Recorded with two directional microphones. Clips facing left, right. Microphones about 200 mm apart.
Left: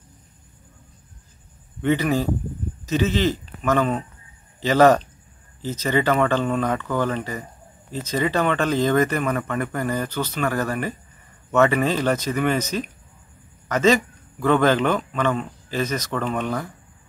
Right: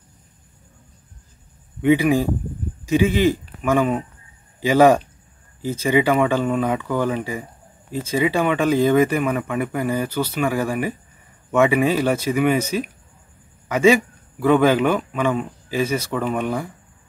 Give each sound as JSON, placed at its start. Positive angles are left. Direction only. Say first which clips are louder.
{"t": 1.8, "sound": "a man's voice", "louder": "right 4 dB", "side_deg": -10}